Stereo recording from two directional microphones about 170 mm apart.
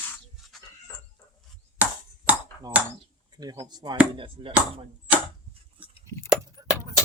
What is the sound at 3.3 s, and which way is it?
Speech, 20° right (ahead or behind).